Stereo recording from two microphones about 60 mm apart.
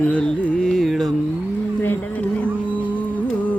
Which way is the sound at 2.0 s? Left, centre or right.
Left.